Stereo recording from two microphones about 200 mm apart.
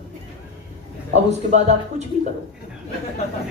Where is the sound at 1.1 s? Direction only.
35° right (ahead or behind).